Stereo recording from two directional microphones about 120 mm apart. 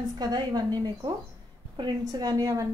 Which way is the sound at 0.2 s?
35° right (ahead or behind).